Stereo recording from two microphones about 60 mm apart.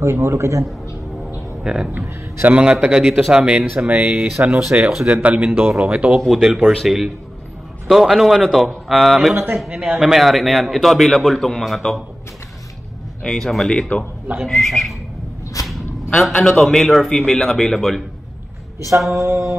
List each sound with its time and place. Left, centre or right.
0.0 s a man's voice: right
1.6 s speech: centre
2.4 s speech: right
3.1 s speech: centre
3.8 s a man's voice: right; by 9.3 s centre
9.3 s speech: right
9.7 s speech: centre
9.9 s a man's voice: centre
13.2 s a man's voice: centre
15.6 s a sound: left
16.1 s a man's voice: centre
19.0 s a man's voice: right